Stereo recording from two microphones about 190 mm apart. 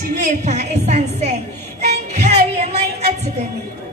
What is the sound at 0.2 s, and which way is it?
Music, 35° right (ahead or behind).